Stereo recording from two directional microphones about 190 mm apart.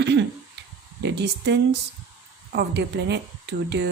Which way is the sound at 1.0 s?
60° right (ahead or behind).